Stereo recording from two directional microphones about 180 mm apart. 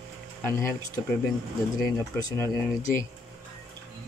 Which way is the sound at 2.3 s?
15° left (ahead or behind).